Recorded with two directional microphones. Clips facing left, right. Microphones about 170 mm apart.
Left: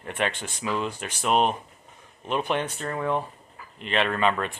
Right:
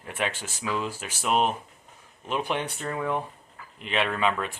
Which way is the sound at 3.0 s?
20° left (ahead or behind).